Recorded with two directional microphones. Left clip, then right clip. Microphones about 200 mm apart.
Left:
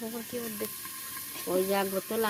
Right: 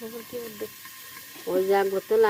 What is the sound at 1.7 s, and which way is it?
Speech, 20° right (ahead or behind).